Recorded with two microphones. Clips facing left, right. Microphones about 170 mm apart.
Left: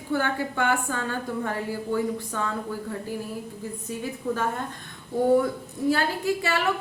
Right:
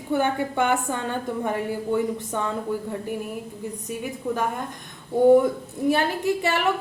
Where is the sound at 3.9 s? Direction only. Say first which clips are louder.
Even; 15° right (ahead or behind).